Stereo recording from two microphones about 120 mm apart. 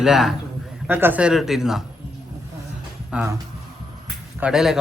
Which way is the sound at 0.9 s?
15° right (ahead or behind).